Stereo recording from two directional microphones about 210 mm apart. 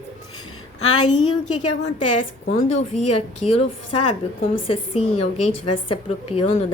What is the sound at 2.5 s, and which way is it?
A woman's voice, 35° left (ahead or behind).